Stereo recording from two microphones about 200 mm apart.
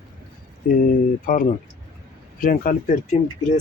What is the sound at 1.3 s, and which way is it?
Speech, 40° left (ahead or behind).